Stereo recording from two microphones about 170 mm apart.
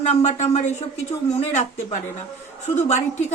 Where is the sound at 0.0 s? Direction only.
40° left (ahead or behind).